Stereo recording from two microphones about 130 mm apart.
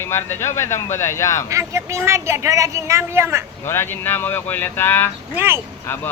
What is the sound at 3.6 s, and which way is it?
Speech, 20° left (ahead or behind).